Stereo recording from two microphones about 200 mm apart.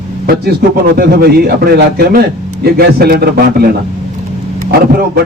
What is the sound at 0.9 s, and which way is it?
A man's voice, 50° right (ahead or behind).